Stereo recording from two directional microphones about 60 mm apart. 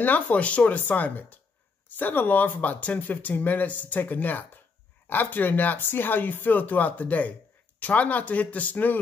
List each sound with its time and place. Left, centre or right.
0.0 s speech: left